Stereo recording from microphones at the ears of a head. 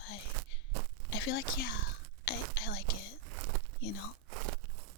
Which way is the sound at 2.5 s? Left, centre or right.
Left.